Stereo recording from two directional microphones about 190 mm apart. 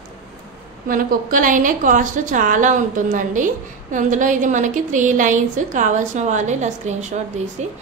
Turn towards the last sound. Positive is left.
turn(degrees=-40)  # may be behind; listen again after turning